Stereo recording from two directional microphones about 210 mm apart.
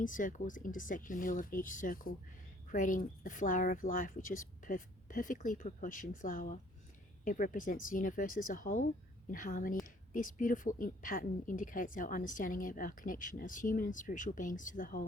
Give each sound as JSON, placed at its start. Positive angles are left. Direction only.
{"t": 0.0, "sound": "a woman's voice", "side_deg": 40}